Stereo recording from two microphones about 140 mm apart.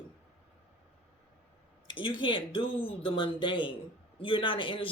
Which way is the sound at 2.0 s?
35° left (ahead or behind).